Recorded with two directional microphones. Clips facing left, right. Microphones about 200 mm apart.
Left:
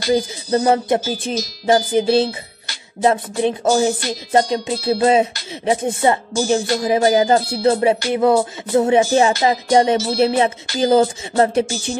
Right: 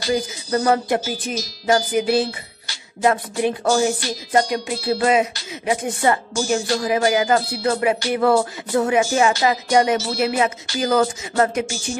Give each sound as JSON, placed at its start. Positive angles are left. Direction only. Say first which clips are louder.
{"t": 0.1, "sound": "speech", "louder": "left 4 dB", "side_deg": 25}